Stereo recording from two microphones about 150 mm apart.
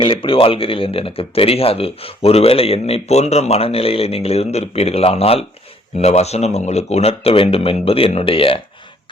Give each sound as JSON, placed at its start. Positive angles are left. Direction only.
{"t": 0.0, "sound": "speech", "side_deg": 35}